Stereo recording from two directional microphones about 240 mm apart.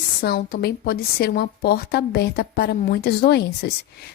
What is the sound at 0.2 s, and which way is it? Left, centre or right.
Speech, left.